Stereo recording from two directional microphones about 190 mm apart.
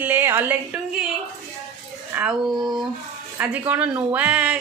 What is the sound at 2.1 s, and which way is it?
Speech, 5° right (ahead or behind).